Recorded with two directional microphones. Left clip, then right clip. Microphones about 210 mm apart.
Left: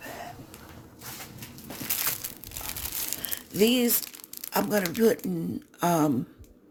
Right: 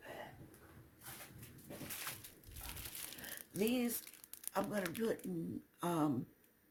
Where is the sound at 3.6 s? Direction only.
40° left (ahead or behind).